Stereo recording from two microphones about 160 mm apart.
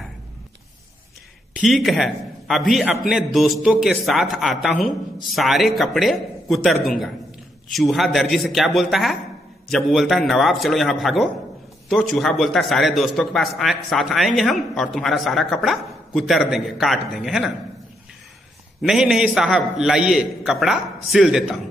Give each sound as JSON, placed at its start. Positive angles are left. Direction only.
{"t": 1.5, "sound": "a man's voice", "side_deg": 0}
{"t": 18.8, "sound": "a man's voice", "side_deg": 0}